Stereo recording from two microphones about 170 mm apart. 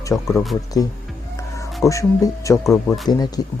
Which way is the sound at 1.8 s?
20° left (ahead or behind).